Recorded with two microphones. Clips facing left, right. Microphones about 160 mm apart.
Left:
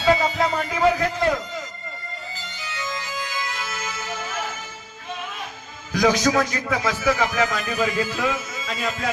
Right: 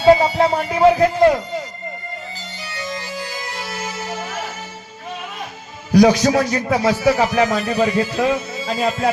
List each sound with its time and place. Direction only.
0.0 s speech: 35° right (ahead or behind)
2.6 s music: 30° right (ahead or behind)
5.9 s a man's voice: 35° right (ahead or behind)